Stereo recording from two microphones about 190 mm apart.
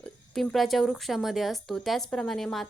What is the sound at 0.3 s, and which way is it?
Speech, centre (ahead or behind).